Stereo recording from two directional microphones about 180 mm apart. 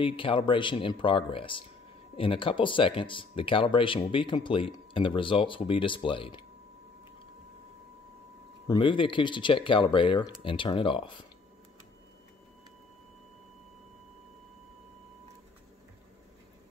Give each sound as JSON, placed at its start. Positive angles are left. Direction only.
{"t": 0.0, "sound": "speech", "side_deg": 30}
{"t": 8.6, "sound": "speech", "side_deg": 25}